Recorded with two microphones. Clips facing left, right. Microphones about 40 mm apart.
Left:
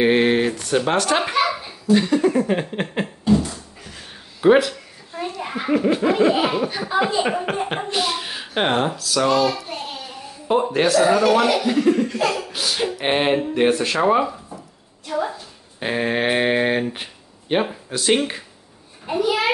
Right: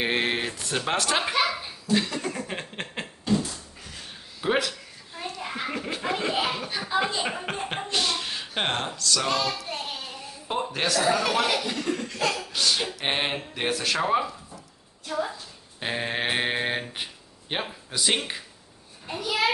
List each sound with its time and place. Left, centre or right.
0.0 s a sound: centre
5.4 s speech: centre
15.8 s a child's voice: centre